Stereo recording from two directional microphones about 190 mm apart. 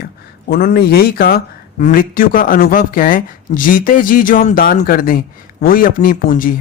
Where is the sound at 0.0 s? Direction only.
55° left (ahead or behind).